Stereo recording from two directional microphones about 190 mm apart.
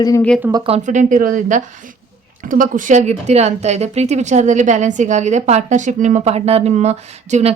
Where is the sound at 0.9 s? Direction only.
40° right (ahead or behind).